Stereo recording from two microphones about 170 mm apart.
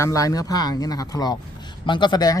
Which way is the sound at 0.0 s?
20° left (ahead or behind).